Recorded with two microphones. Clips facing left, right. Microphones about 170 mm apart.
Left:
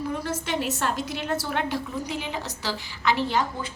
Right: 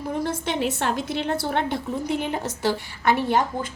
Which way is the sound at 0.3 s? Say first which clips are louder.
Right 3 dB; 55° right (ahead or behind).